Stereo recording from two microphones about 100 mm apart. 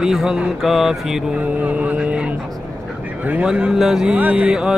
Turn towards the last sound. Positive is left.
turn(degrees=-5)  # may be behind; listen again after turning